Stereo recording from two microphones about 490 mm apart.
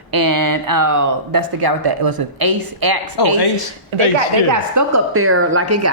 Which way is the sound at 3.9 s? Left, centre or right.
Right.